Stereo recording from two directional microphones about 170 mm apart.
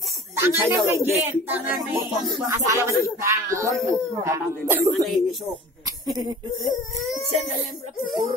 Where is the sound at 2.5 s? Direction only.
15° right (ahead or behind).